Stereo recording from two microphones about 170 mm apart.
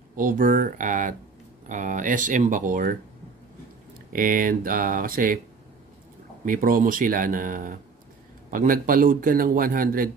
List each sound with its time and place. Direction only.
0.1 s speech: 55° right (ahead or behind)
4.1 s a man's voice: 55° right (ahead or behind)
6.4 s a man's voice: 55° right (ahead or behind)